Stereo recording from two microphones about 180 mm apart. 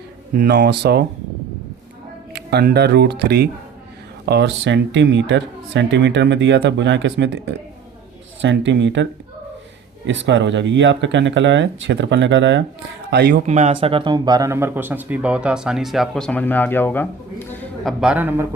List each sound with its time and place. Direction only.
0.3 s speech: 65° right (ahead or behind)
2.3 s speech: 65° right (ahead or behind); by 9.0 s 80° right
10.1 s speech: 90° right
13.1 s a man's voice: 70° right (ahead or behind)
13.3 s speech: 40° right (ahead or behind); by 17.9 s 10° left (ahead or behind)
18.0 s speech: 10° right (ahead or behind)